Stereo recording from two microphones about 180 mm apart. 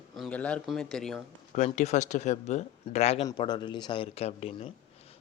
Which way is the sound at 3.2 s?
25° left (ahead or behind).